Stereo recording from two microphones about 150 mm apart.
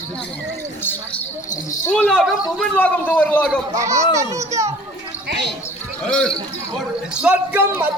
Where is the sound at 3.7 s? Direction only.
20° right (ahead or behind).